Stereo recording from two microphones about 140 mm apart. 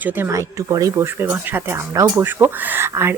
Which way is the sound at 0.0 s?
20° right (ahead or behind).